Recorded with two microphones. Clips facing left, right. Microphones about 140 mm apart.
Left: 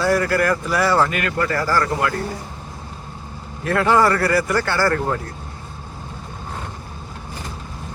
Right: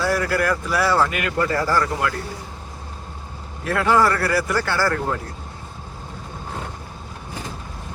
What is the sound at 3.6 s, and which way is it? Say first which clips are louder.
Speech: left 2 dB; 5° right (ahead or behind).